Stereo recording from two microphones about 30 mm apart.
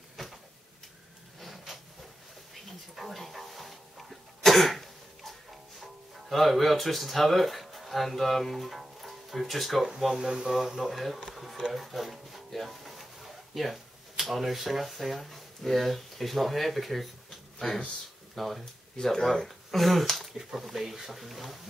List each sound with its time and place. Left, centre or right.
3.0 s a sound: centre
4.5 s cough: centre
5.8 s speech: centre
10.1 s speech: right
10.9 s speech: centre
12.8 s a sound: centre
15.6 s speech: centre